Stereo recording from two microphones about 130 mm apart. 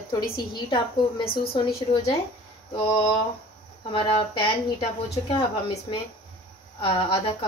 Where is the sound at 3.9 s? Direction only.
40° left (ahead or behind).